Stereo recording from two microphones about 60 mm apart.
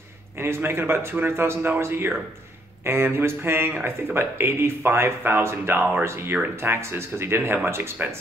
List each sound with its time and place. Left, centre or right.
0.4 s speech: right